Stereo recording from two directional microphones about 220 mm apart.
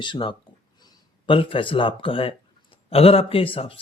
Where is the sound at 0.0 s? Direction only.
20° left (ahead or behind).